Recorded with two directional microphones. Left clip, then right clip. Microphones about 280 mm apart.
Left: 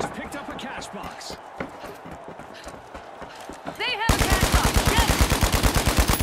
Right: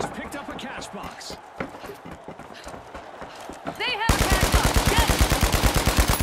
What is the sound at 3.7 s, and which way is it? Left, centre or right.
Gunshot, centre.